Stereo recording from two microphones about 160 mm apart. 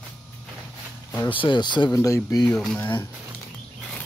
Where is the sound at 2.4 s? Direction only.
5° left (ahead or behind).